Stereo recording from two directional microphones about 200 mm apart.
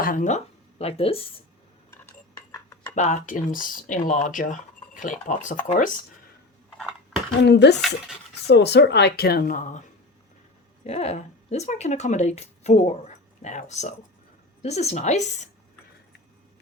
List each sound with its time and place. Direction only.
0.0 s speech: 40° left (ahead or behind)
1.9 s a sound: 15° left (ahead or behind)
2.9 s speech: 35° left (ahead or behind)
6.7 s a sound: centre (ahead or behind)
7.4 s speech: 55° left (ahead or behind); by 9.8 s 40° left (ahead or behind)
10.8 s speech: 30° left (ahead or behind)